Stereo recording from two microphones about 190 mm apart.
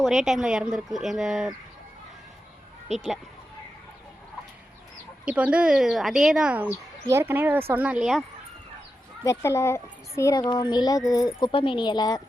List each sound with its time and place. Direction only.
0.0 s speech: centre (ahead or behind)
5.2 s speech: 5° right (ahead or behind)
9.2 s a child's voice: 15° left (ahead or behind)